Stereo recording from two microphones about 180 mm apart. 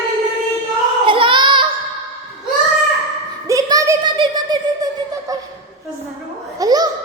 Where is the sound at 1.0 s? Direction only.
30° right (ahead or behind).